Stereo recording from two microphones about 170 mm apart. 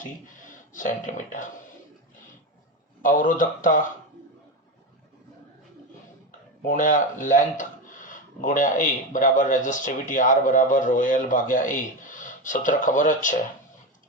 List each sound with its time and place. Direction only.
0.0 s speech: 50° left (ahead or behind)
3.0 s speech: 50° left (ahead or behind)
6.7 s speech: 50° left (ahead or behind)